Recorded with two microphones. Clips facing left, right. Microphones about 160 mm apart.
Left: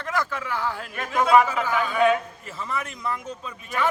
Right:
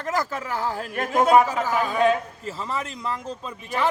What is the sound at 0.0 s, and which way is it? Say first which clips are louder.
A man's voice: right 2 dB; 40° right (ahead or behind).